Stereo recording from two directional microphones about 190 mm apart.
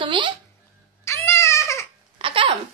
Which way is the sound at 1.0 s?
15° left (ahead or behind).